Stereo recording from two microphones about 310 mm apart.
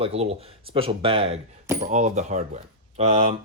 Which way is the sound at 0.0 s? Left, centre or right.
Centre.